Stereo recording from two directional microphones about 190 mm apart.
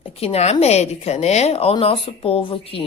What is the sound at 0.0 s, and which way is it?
A woman's voice, 30° left (ahead or behind).